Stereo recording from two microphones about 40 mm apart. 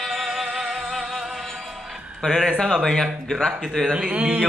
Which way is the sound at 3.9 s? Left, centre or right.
Right.